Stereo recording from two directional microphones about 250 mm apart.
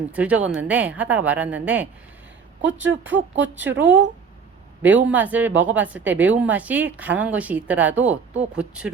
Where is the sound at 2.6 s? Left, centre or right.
Right.